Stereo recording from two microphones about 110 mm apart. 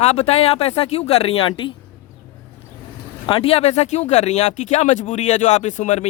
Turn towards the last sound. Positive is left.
turn(degrees=90)